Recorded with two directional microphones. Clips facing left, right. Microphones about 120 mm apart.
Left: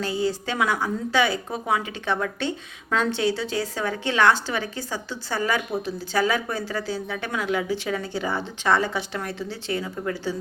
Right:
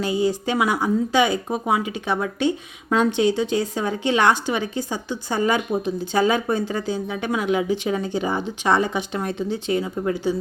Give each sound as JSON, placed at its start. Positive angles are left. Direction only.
{"t": 0.0, "sound": "speech", "side_deg": -15}